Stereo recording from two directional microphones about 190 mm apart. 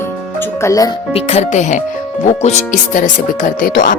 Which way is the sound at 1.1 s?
35° left (ahead or behind).